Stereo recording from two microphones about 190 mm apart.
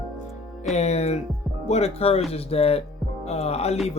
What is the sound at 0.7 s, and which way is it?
Speech, 35° left (ahead or behind).